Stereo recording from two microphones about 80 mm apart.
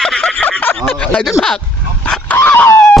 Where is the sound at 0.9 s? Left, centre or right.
Centre.